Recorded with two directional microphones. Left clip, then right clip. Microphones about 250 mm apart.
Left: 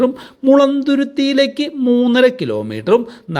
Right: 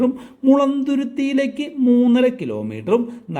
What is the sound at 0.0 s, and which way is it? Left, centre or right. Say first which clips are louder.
Speech: left 4 dB; centre.